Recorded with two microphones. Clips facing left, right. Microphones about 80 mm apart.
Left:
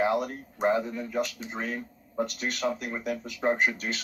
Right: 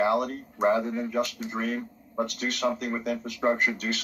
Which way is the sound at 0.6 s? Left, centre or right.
Centre.